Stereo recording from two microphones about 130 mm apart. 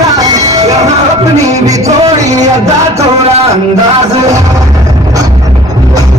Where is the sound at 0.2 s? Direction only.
25° right (ahead or behind).